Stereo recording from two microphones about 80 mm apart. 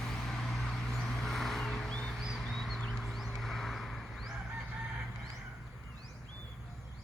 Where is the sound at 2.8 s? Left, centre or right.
Centre.